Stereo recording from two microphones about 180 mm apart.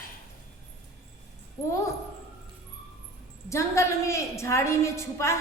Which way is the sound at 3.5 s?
15° left (ahead or behind).